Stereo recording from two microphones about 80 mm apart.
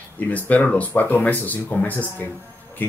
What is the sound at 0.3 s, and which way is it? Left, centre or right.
Speech, centre.